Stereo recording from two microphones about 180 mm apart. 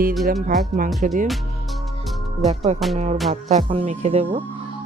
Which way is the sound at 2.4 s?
40° right (ahead or behind).